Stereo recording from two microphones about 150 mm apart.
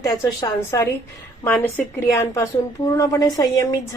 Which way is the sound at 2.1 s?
20° left (ahead or behind).